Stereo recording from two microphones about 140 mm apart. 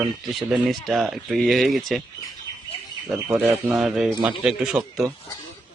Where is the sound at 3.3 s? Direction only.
10° right (ahead or behind).